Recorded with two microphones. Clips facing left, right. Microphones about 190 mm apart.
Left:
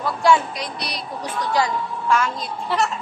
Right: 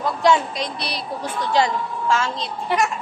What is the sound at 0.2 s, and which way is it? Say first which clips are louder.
A woman's voice: left 1 dB; 25° right (ahead or behind).